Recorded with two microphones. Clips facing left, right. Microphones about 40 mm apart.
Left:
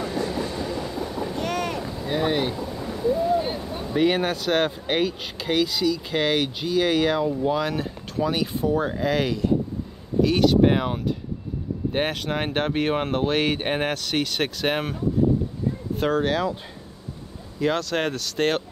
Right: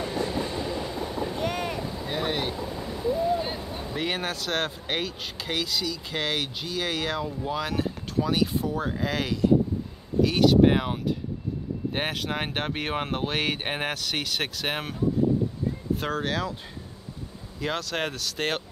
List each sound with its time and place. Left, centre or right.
0.0 s train: centre
1.4 s boat: left
2.0 s speech: centre
3.1 s a sound: centre
3.9 s speech: centre
16.0 s speech: centre
17.6 s speech: centre